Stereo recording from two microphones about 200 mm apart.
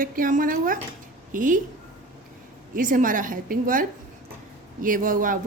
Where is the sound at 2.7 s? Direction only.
40° right (ahead or behind).